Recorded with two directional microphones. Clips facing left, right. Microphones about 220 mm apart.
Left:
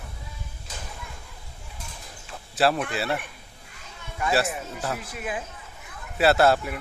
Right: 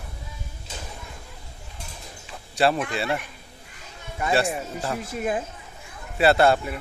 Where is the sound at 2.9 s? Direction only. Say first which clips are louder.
Right 1 dB; centre (ahead or behind).